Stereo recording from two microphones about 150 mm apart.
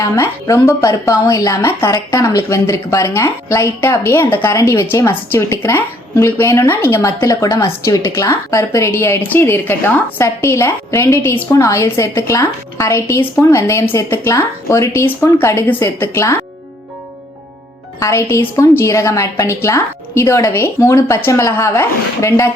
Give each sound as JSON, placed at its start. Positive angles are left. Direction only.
{"t": 0.2, "sound": "a woman's voice", "side_deg": 20}
{"t": 18.0, "sound": "a woman's voice", "side_deg": 20}